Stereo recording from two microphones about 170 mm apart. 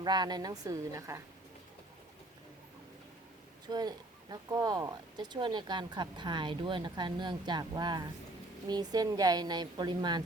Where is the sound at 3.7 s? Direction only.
25° right (ahead or behind).